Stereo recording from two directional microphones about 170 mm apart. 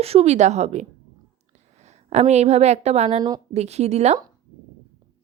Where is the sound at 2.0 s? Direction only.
40° right (ahead or behind).